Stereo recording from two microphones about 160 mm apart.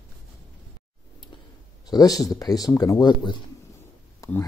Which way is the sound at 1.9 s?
25° left (ahead or behind).